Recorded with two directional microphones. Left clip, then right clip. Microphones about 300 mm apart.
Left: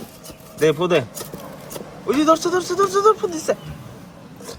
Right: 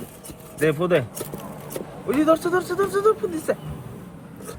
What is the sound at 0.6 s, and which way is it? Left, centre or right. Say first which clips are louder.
Speech: left 3 dB; centre.